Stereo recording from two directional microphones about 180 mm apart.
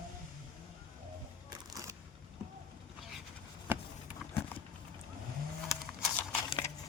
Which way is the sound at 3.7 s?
10° right (ahead or behind).